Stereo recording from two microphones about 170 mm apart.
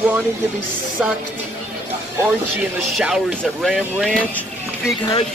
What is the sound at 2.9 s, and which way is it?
Speech, 5° right (ahead or behind).